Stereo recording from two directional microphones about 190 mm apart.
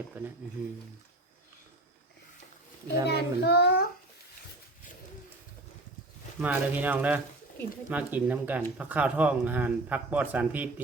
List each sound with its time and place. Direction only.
3.1 s a child's voice: 60° left (ahead or behind)
6.4 s speech: 10° right (ahead or behind)